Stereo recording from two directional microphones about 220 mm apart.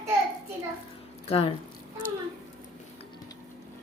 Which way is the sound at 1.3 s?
25° left (ahead or behind).